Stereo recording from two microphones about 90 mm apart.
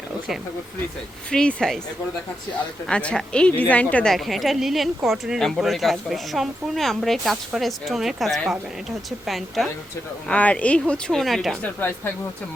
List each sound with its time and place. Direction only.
1.3 s a woman's voice: 10° left (ahead or behind)
2.8 s a woman's voice: 10° left (ahead or behind)
4.1 s speech: centre (ahead or behind)
10.2 s a woman's voice: 15° left (ahead or behind)
11.6 s speech: 25° left (ahead or behind)